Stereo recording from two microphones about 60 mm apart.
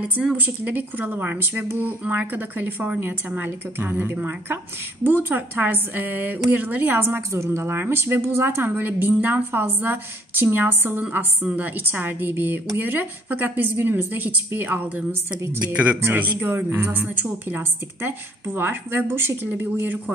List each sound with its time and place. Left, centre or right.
0.4 s a woman's voice: right